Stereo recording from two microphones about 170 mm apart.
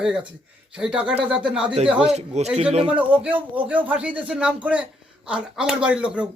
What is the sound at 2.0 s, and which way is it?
Speech, 40° right (ahead or behind).